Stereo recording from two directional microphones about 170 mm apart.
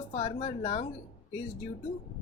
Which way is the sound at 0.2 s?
30° left (ahead or behind).